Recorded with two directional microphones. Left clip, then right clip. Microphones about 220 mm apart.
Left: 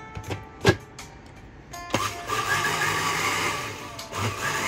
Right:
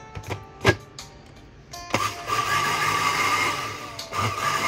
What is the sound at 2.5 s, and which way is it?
Vehicle, centre (ahead or behind).